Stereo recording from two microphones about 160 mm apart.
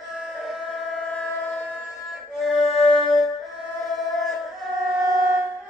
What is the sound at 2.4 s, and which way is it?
Music, centre (ahead or behind).